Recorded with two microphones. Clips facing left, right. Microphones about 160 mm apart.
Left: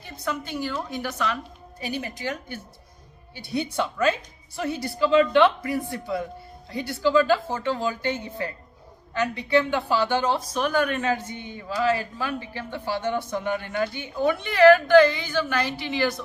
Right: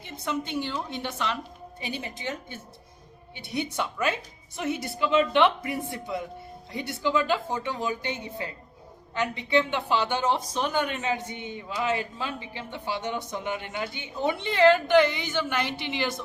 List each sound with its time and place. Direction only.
0.0 s a woman's voice: 25° right (ahead or behind)